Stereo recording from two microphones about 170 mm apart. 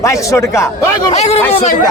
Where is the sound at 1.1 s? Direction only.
40° left (ahead or behind).